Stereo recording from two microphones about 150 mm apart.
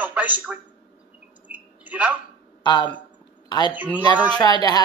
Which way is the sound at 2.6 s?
30° left (ahead or behind).